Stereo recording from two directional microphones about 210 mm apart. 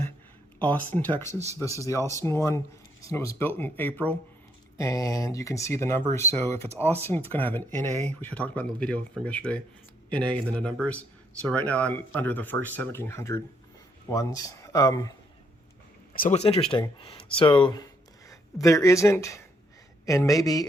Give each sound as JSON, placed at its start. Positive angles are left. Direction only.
{"t": 0.6, "sound": "speech", "side_deg": 10}
{"t": 16.1, "sound": "speech", "side_deg": 35}